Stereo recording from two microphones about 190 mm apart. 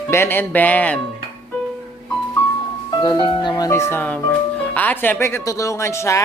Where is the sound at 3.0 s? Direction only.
25° left (ahead or behind).